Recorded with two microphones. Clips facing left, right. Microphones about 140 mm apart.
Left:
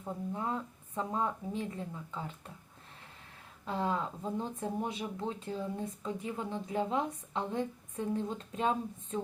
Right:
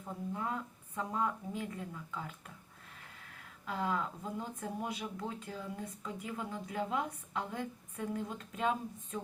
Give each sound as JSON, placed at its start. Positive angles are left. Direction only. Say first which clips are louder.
{"t": 0.0, "sound": "speech", "louder": "left 2 dB", "side_deg": 25}
{"t": 3.7, "sound": "speech", "louder": "left 2 dB", "side_deg": 25}